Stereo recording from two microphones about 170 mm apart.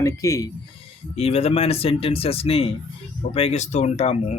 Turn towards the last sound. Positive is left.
turn(degrees=40)  # may be behind; listen again after turning